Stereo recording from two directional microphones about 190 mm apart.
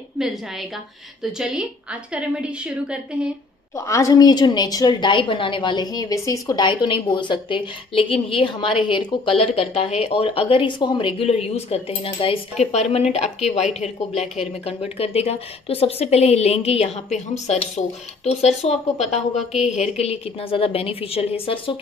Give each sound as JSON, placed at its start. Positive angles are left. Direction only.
{"t": 0.2, "sound": "a woman's voice", "side_deg": 0}
{"t": 3.7, "sound": "a woman's voice", "side_deg": 15}